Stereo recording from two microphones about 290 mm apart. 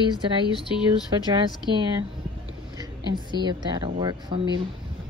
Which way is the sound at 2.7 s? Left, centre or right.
Centre.